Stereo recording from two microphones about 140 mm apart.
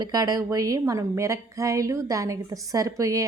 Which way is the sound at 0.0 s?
25° right (ahead or behind).